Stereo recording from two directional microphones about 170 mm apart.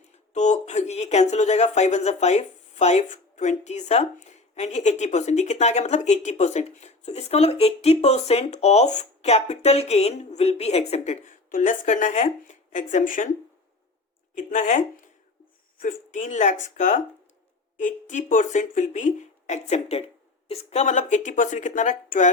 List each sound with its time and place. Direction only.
0.3 s speech: 45° left (ahead or behind)
14.3 s speech: 50° left (ahead or behind)